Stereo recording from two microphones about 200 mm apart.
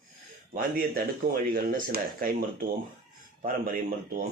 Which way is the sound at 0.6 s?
45° right (ahead or behind).